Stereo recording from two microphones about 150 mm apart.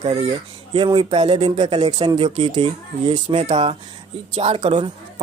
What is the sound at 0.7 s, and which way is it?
Speech, 35° right (ahead or behind).